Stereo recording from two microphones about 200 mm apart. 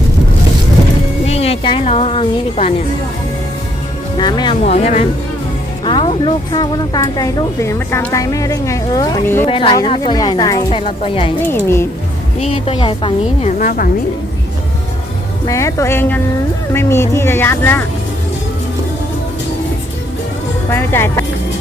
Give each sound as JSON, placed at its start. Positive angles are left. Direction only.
{"t": 1.3, "sound": "a woman's voice", "side_deg": 30}
{"t": 4.2, "sound": "a woman's voice", "side_deg": 20}
{"t": 4.6, "sound": "speech", "side_deg": 35}
{"t": 9.5, "sound": "a woman's voice", "side_deg": 25}
{"t": 13.6, "sound": "a woman's voice", "side_deg": 45}
{"t": 15.4, "sound": "speech", "side_deg": 15}
{"t": 20.7, "sound": "speech", "side_deg": 10}